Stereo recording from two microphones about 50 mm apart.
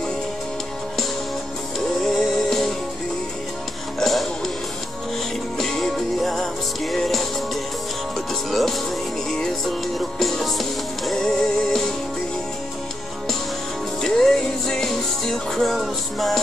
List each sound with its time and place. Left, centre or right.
2.0 s music: centre
4.0 s music: centre
5.6 s music: centre
8.5 s music: centre
14.0 s music: centre